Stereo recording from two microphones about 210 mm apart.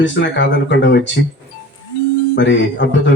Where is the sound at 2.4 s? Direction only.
60° left (ahead or behind).